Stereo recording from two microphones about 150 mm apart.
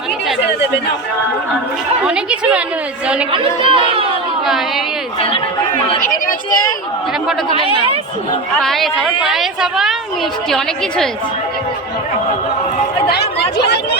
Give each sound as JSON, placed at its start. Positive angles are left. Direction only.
{"t": 2.0, "sound": "a woman's voice", "side_deg": -5}
{"t": 3.3, "sound": "speech", "side_deg": -35}
{"t": 6.0, "sound": "speech", "side_deg": 65}
{"t": 8.6, "sound": "a woman's voice", "side_deg": 0}